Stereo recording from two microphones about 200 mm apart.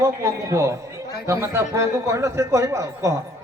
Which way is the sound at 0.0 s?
15° right (ahead or behind).